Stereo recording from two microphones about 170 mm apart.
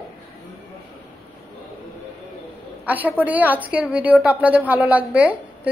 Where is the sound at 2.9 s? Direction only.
10° right (ahead or behind).